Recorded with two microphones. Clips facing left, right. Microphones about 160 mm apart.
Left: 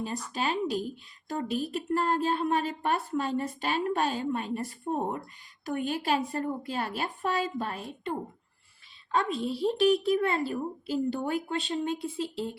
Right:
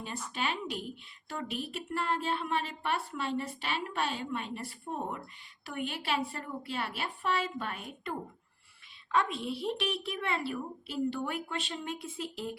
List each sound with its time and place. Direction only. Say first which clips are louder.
0.3 s speech: left 6 dB; 40° left (ahead or behind)
9.1 s speech: left 3 dB; 35° left (ahead or behind)